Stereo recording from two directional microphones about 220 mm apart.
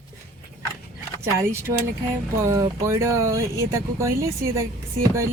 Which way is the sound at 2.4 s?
15° right (ahead or behind).